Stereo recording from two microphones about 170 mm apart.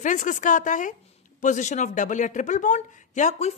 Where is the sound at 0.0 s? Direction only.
50° left (ahead or behind).